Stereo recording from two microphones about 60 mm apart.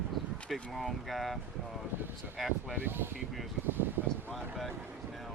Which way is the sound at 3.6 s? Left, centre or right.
Right.